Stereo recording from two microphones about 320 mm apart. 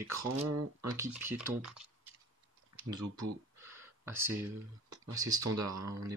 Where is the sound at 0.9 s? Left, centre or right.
Centre.